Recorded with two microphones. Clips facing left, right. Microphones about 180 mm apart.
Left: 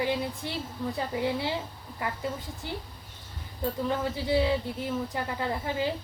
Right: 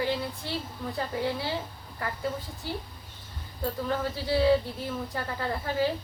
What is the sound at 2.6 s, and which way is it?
Speech, 20° left (ahead or behind).